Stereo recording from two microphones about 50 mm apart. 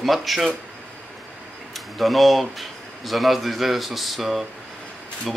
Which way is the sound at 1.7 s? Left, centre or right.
Centre.